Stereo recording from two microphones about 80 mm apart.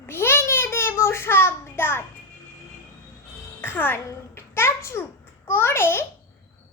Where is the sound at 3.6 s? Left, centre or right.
Left.